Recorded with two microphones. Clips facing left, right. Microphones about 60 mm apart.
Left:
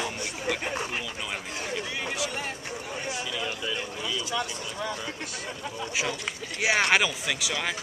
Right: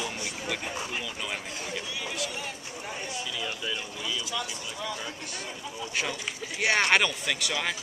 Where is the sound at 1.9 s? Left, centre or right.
Left.